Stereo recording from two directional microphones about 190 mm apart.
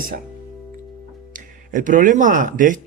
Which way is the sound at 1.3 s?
45° right (ahead or behind).